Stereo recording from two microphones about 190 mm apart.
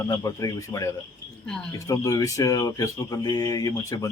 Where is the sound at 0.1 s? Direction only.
20° left (ahead or behind).